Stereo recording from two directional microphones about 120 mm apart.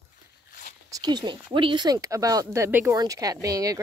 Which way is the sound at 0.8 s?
30° right (ahead or behind).